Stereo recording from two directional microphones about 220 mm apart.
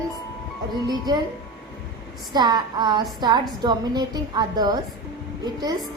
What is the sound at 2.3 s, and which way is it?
A woman's voice, 20° right (ahead or behind).